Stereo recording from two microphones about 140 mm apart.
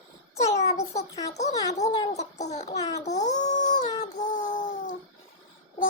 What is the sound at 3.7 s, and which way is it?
Synthetic singing, 30° left (ahead or behind).